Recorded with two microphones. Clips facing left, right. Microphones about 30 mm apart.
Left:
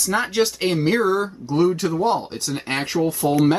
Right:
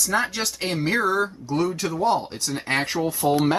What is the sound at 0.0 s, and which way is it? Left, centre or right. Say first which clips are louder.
Speech: left 4 dB; centre.